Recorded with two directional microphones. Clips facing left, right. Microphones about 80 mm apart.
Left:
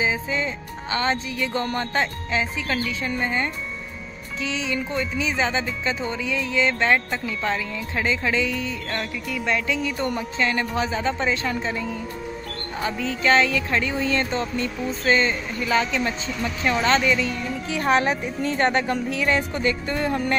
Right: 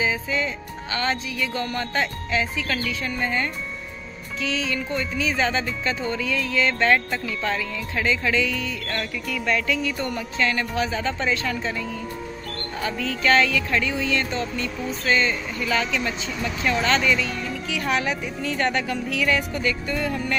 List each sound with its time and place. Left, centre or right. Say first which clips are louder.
0.0 s speech: even; left